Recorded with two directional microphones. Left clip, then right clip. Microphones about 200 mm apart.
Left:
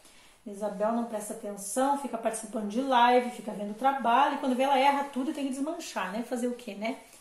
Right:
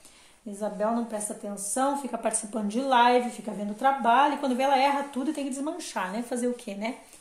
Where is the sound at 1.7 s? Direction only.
45° right (ahead or behind).